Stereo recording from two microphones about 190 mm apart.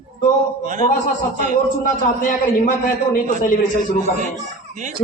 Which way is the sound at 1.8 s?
45° left (ahead or behind).